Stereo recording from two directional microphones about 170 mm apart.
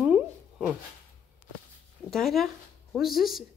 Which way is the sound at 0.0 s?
10° right (ahead or behind).